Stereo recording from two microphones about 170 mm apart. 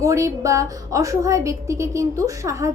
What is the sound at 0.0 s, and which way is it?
A woman's voice, 20° right (ahead or behind).